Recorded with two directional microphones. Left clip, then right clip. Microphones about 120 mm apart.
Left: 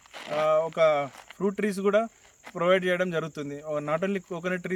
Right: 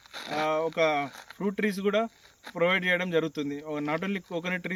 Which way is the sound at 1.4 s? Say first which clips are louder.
Left 2 dB; 35° left (ahead or behind).